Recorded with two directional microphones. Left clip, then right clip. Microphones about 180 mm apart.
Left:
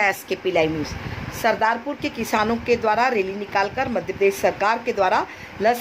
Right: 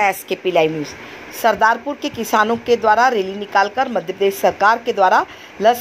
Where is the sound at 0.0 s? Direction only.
20° right (ahead or behind).